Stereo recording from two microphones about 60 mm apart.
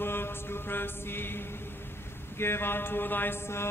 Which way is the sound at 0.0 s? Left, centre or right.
Left.